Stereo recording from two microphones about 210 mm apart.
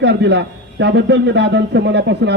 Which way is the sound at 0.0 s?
55° right (ahead or behind).